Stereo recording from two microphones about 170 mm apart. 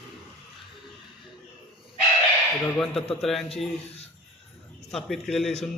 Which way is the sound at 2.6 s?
5° left (ahead or behind).